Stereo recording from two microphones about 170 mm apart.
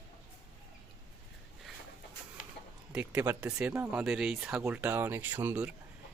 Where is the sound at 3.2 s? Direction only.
10° right (ahead or behind).